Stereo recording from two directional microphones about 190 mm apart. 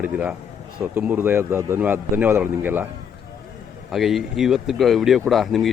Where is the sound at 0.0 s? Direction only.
5° right (ahead or behind).